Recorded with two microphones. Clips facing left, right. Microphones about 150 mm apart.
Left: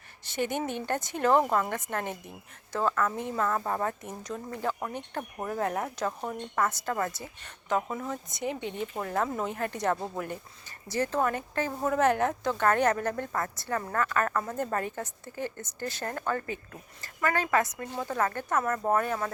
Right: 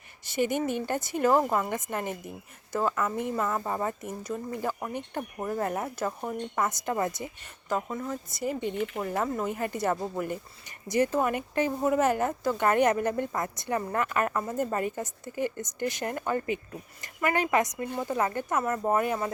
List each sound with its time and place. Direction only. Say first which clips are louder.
0.3 s speech: right 3 dB; 10° right (ahead or behind)
7.7 s speech: left 1 dB; centre (ahead or behind)
10.7 s speech: right 4 dB; 15° right (ahead or behind)